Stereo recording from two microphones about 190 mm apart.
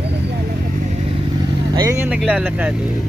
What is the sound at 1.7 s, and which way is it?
Speech, 15° right (ahead or behind).